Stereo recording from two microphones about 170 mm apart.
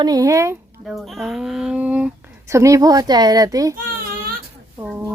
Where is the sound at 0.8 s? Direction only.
Centre (ahead or behind).